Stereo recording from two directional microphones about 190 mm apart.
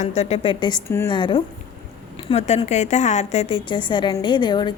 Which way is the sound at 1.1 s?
25° left (ahead or behind).